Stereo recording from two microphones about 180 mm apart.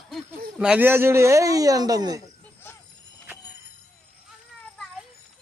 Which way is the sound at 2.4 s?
10° left (ahead or behind).